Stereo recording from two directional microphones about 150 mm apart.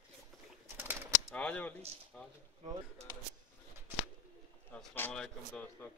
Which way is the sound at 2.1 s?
5° left (ahead or behind).